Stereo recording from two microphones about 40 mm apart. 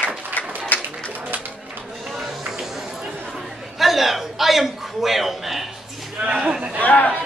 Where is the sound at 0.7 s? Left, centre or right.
Left.